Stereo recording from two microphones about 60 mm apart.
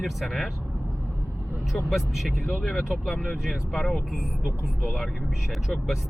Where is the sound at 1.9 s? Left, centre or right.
Centre.